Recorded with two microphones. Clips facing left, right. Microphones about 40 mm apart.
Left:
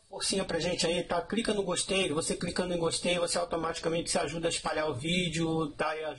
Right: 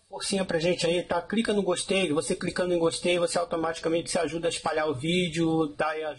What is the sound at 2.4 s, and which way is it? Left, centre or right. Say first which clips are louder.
A man's voice: right 7 dB; centre.